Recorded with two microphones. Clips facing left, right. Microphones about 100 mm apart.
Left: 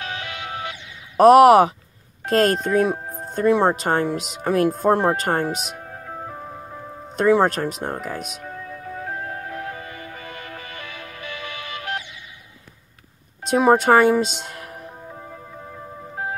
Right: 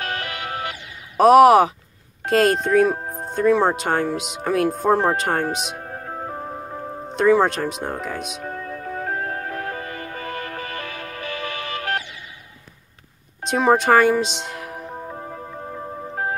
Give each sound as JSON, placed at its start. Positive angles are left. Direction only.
{"t": 0.0, "sound": "music", "side_deg": -50}
{"t": 1.1, "sound": "speech", "side_deg": 0}
{"t": 3.0, "sound": "music", "side_deg": -40}
{"t": 3.3, "sound": "speech", "side_deg": 0}
{"t": 5.8, "sound": "music", "side_deg": -50}
{"t": 7.2, "sound": "speech", "side_deg": 0}
{"t": 8.4, "sound": "music", "side_deg": -55}
{"t": 13.5, "sound": "speech", "side_deg": 5}
{"t": 15.0, "sound": "music", "side_deg": -45}